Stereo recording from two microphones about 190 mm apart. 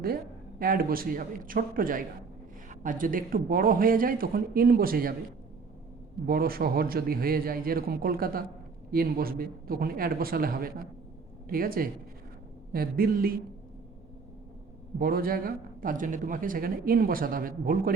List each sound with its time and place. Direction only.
0.6 s speech: 50° right (ahead or behind)
6.2 s speech: 50° right (ahead or behind)
14.9 s speech: 50° right (ahead or behind)